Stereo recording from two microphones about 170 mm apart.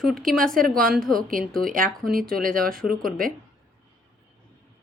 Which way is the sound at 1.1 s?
55° right (ahead or behind).